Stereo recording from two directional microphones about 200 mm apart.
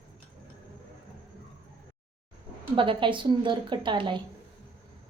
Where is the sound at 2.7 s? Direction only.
25° right (ahead or behind).